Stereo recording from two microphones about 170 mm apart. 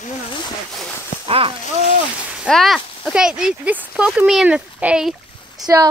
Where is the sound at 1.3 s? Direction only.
35° right (ahead or behind).